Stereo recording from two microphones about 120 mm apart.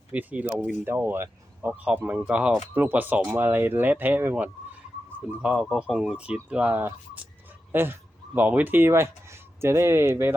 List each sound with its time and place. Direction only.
0.1 s speech: 15° right (ahead or behind)
5.4 s speech: 5° right (ahead or behind)